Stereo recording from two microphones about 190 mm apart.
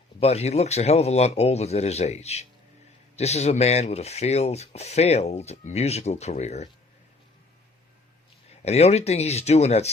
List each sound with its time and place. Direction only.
0.2 s speech: 35° left (ahead or behind)
8.6 s speech: 35° left (ahead or behind)